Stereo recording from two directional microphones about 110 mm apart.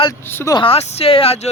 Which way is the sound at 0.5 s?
60° left (ahead or behind).